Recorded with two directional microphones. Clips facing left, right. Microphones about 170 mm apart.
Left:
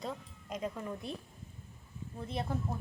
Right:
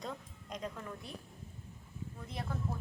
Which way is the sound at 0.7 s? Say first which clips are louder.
Left 5 dB; 20° left (ahead or behind).